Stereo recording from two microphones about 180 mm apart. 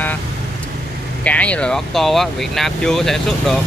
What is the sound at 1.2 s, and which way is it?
Speech, 10° left (ahead or behind).